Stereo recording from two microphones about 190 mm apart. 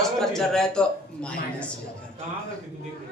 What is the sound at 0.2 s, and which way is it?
A woman's voice, 5° left (ahead or behind).